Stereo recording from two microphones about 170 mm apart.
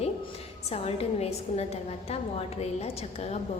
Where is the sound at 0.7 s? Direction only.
35° left (ahead or behind).